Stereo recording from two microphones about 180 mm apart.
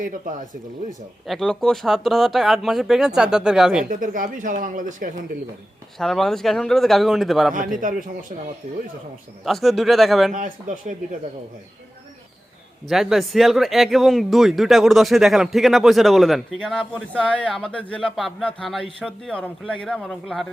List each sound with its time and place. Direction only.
0.0 s speech: 50° right (ahead or behind)
1.3 s speech: 5° left (ahead or behind)
3.8 s speech: 50° right (ahead or behind)
6.0 s speech: centre (ahead or behind)
8.6 s speech: 50° right (ahead or behind)
9.4 s speech: centre (ahead or behind)
10.3 s speech: 50° right (ahead or behind)
12.9 s speech: centre (ahead or behind)